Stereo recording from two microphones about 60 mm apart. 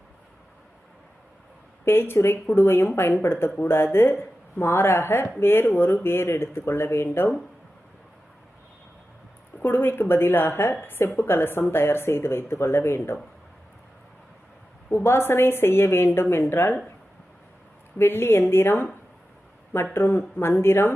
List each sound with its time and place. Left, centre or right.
1.8 s a woman's voice: left
9.6 s a woman's voice: left
14.8 s a woman's voice: left
17.9 s a woman's voice: left